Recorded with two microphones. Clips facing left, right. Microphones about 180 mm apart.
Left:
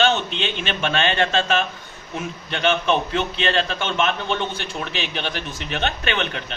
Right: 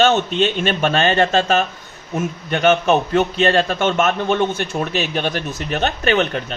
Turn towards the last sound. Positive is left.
turn(degrees=-40)  # may be behind; listen again after turning